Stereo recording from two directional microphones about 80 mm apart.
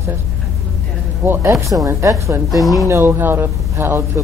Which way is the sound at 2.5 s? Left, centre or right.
Centre.